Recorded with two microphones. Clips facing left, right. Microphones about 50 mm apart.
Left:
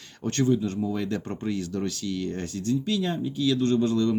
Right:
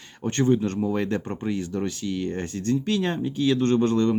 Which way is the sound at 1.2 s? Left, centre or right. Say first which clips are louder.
Right 2 dB; right.